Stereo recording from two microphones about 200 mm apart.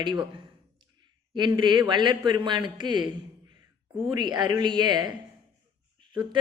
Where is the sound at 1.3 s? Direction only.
20° right (ahead or behind).